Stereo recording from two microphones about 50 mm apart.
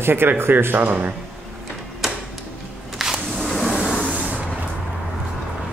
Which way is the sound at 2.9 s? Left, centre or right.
Centre.